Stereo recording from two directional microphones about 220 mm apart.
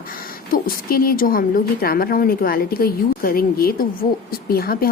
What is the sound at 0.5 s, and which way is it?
A woman's voice, 40° left (ahead or behind).